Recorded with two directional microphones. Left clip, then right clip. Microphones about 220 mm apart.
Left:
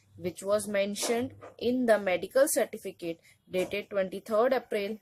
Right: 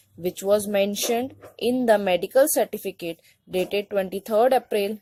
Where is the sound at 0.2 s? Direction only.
25° right (ahead or behind).